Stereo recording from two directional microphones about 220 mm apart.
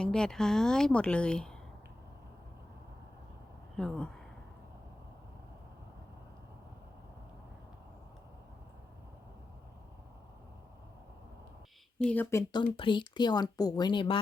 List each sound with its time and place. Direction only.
0.0 s a woman's voice: 5° left (ahead or behind)
3.8 s a woman's voice: 5° left (ahead or behind)
12.0 s speech: 10° left (ahead or behind)